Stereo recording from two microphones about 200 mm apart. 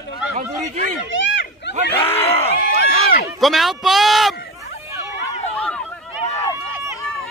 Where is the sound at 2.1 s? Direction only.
10° left (ahead or behind).